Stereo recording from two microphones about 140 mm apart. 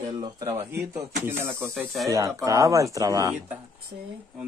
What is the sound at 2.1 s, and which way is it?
Speech, 25° right (ahead or behind).